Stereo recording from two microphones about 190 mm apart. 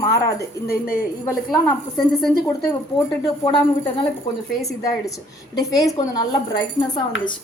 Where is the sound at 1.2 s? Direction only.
15° left (ahead or behind).